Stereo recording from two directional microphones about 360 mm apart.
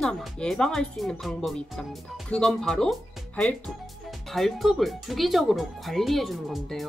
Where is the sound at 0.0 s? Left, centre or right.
Centre.